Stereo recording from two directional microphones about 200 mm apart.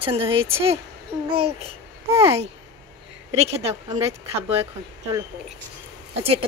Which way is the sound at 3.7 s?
15° right (ahead or behind).